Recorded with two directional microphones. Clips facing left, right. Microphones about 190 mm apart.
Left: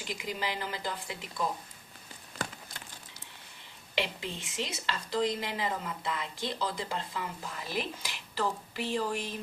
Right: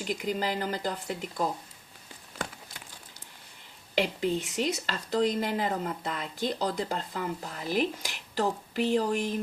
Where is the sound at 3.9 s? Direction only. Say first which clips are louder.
Right 8 dB; 45° right (ahead or behind).